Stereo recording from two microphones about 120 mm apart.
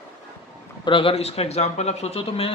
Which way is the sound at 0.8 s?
45° left (ahead or behind).